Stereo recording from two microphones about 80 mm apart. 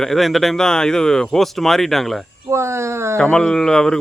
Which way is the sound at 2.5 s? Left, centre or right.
Right.